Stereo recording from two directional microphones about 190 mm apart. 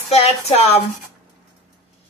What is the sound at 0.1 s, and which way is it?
Speech, 35° left (ahead or behind).